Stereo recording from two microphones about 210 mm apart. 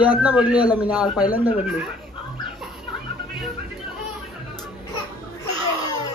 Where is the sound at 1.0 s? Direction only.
20° left (ahead or behind).